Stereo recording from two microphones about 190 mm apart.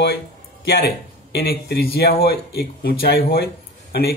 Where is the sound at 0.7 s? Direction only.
55° left (ahead or behind).